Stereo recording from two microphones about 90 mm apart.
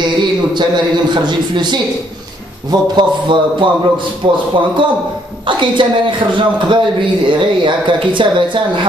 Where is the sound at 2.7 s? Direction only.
60° right (ahead or behind).